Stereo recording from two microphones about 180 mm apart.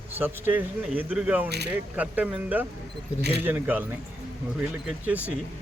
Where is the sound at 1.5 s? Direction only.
65° right (ahead or behind).